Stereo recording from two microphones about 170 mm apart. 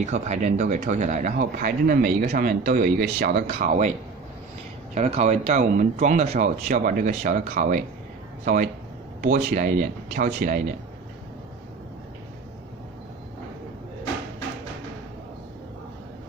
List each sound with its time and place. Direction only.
0.0 s speech: 45° right (ahead or behind)
4.9 s speech: 45° right (ahead or behind)
6.7 s speech: 55° right (ahead or behind)
9.2 s speech: 60° right (ahead or behind)